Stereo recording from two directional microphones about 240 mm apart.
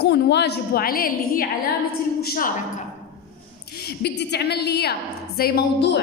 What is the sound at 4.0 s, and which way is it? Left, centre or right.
A woman's voice, left.